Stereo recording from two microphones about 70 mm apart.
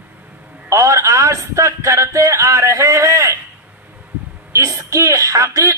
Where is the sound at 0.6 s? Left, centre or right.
Right.